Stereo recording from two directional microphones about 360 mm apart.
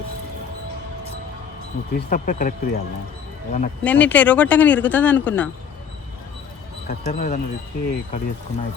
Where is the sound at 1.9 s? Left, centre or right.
Left.